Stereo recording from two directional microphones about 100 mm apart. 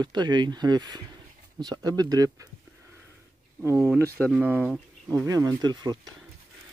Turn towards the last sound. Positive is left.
turn(degrees=-45)  # may be behind; listen again after turning